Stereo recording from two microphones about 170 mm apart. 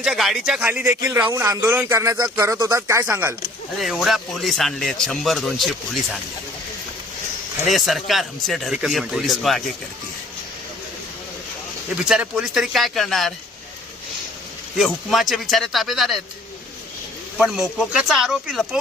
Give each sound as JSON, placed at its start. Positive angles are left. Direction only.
{"t": 0.0, "sound": "speech", "side_deg": 0}
{"t": 7.7, "sound": "speech", "side_deg": 0}
{"t": 11.9, "sound": "speech", "side_deg": -5}
{"t": 14.8, "sound": "speech", "side_deg": 0}
{"t": 17.3, "sound": "speech", "side_deg": -5}